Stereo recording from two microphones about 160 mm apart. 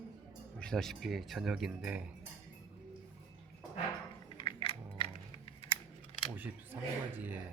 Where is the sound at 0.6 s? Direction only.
5° left (ahead or behind).